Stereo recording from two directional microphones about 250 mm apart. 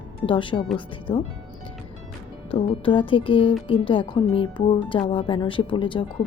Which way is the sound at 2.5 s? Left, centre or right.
Centre.